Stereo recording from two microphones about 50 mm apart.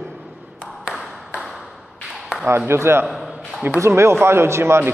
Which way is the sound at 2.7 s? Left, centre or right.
Right.